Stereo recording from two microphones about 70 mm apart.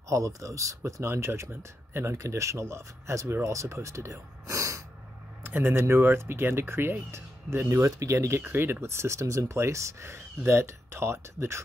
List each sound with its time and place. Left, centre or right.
0.1 s speech: right
5.4 s speech: right
7.5 s speech: right